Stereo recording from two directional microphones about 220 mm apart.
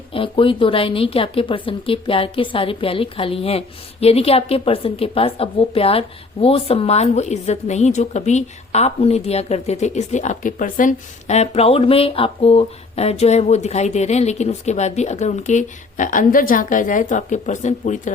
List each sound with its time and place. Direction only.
0.1 s a woman's voice: 25° left (ahead or behind)